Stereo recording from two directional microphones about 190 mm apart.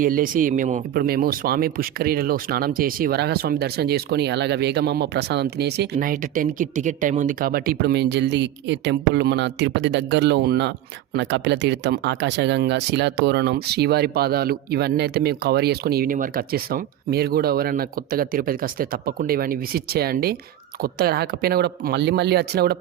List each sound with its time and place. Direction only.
0.0 s speech: 45° right (ahead or behind)